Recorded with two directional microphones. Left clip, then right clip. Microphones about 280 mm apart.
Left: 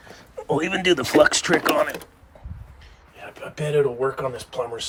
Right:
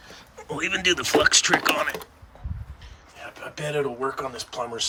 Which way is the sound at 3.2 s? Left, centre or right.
Centre.